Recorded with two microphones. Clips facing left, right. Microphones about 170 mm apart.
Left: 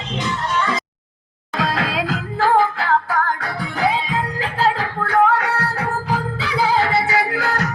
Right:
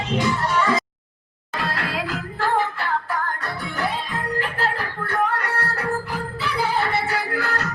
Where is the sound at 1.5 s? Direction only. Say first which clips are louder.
Left 5 dB; 90° left.